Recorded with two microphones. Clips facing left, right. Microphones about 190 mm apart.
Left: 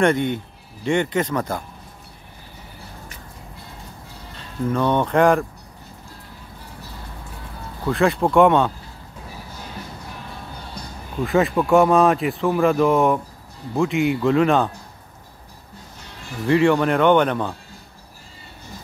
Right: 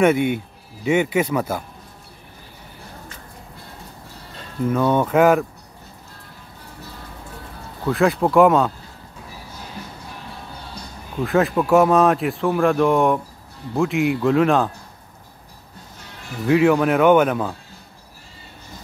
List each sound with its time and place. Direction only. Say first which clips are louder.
0.0 s speech: right 2 dB; 10° right (ahead or behind)
4.6 s speech: right 1 dB; 5° right (ahead or behind)
7.8 s speech: right 1 dB; centre (ahead or behind)
11.2 s speech: even; centre (ahead or behind)
16.4 s speech: right 1 dB; 5° right (ahead or behind)